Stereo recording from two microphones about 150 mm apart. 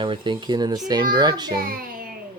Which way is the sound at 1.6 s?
75° right (ahead or behind).